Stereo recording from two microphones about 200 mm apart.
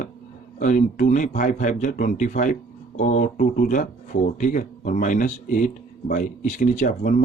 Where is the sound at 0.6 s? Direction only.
40° left (ahead or behind).